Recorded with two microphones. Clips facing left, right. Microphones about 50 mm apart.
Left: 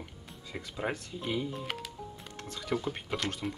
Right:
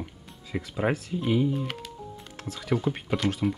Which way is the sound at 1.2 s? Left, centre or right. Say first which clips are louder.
Right 9 dB; centre.